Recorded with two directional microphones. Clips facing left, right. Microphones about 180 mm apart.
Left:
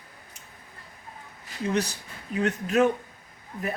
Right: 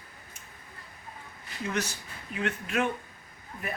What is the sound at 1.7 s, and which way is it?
Speech, 35° left (ahead or behind).